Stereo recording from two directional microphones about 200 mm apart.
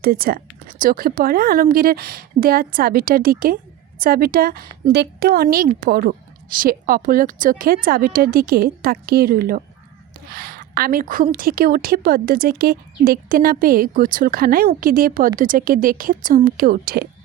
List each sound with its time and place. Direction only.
0.0 s speech: 50° right (ahead or behind)